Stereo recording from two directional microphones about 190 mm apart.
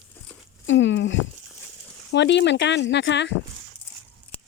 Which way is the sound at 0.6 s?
75° left (ahead or behind).